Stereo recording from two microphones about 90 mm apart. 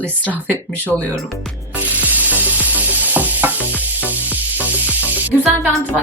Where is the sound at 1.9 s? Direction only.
20° right (ahead or behind).